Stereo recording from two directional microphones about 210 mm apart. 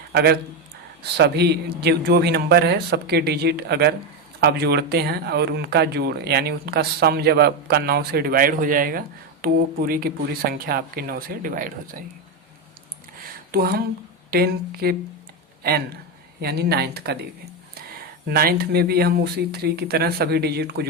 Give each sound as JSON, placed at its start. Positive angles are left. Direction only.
{"t": 0.1, "sound": "a man's voice", "side_deg": -50}
{"t": 13.5, "sound": "speech", "side_deg": -45}
{"t": 16.4, "sound": "speech", "side_deg": -50}
{"t": 18.3, "sound": "speech", "side_deg": -50}